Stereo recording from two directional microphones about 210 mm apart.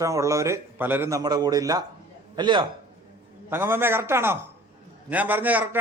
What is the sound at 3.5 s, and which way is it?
A man's voice, 10° right (ahead or behind).